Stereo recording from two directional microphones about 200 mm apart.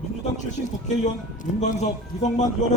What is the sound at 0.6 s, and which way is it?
A man's voice, 40° left (ahead or behind).